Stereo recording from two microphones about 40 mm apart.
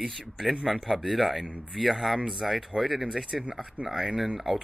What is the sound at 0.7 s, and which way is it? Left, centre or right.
Speech, centre.